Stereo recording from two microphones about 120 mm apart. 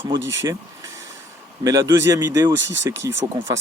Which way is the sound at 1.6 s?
30° right (ahead or behind).